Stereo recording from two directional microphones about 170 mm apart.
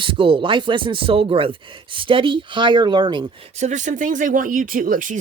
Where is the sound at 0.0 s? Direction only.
30° right (ahead or behind).